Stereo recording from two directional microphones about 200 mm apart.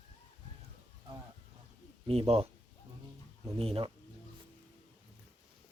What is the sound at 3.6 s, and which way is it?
Speech, 30° right (ahead or behind).